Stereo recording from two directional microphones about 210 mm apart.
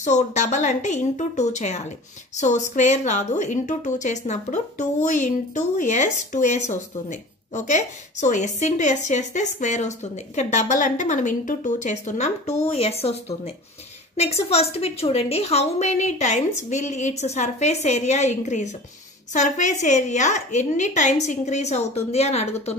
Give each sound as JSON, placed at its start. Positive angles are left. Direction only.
{"t": 0.0, "sound": "a woman's voice", "side_deg": 35}